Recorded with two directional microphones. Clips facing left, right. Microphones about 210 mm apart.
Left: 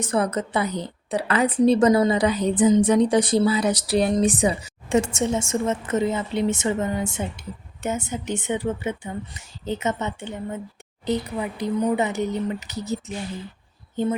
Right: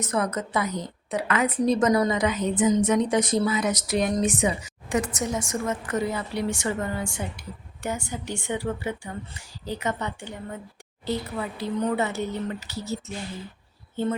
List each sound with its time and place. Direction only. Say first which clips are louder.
0.0 s a woman's voice: left 3 dB; 30° left (ahead or behind)